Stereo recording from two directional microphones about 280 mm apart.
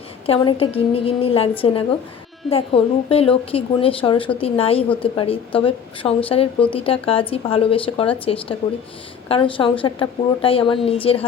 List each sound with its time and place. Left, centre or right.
0.3 s a woman's voice: centre